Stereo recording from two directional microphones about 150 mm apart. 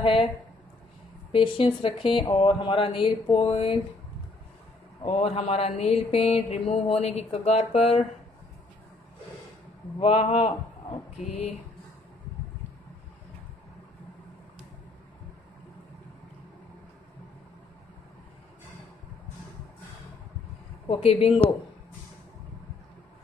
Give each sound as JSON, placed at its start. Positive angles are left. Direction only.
{"t": 0.0, "sound": "speech", "side_deg": 35}
{"t": 1.3, "sound": "speech", "side_deg": 35}
{"t": 5.0, "sound": "a sound", "side_deg": 45}
{"t": 9.9, "sound": "speech", "side_deg": 40}
{"t": 11.1, "sound": "a sound", "side_deg": 45}
{"t": 20.9, "sound": "speech", "side_deg": 40}